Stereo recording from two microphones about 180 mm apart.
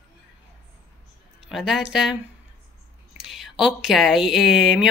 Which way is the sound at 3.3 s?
Centre (ahead or behind).